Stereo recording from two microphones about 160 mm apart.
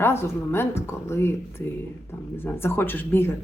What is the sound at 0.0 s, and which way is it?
Speech, 15° left (ahead or behind).